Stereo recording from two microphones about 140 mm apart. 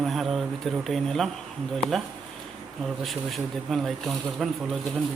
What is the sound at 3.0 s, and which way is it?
Speech, centre (ahead or behind).